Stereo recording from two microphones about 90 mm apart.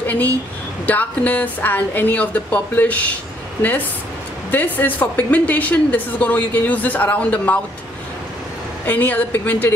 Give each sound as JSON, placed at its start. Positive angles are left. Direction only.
{"t": 0.0, "sound": "a woman's voice", "side_deg": 20}
{"t": 4.5, "sound": "a woman's voice", "side_deg": 20}
{"t": 8.8, "sound": "a woman's voice", "side_deg": 20}